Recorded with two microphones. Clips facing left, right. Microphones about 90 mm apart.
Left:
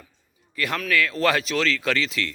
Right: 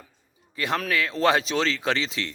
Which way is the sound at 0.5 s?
25° right (ahead or behind).